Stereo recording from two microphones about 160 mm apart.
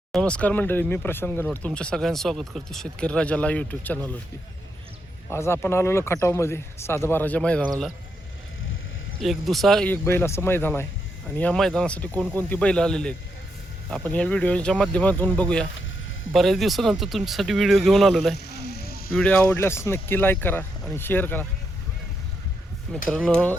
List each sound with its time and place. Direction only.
0.1 s speech: 5° left (ahead or behind)
5.3 s speech: 15° left (ahead or behind)
9.2 s speech: centre (ahead or behind)
12.1 s speech: 15° right (ahead or behind)
12.4 s speech: 10° left (ahead or behind)
18.4 s sheep: 90° left; by 19.1 s 70° left (ahead or behind)
19.1 s speech: 10° left (ahead or behind)
23.0 s speech: 5° left (ahead or behind)